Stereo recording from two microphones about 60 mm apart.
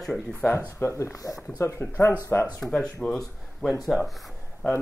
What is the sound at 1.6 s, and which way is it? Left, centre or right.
Speech, left.